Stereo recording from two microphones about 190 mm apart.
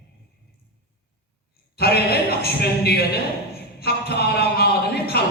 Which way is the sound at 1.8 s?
55° left (ahead or behind).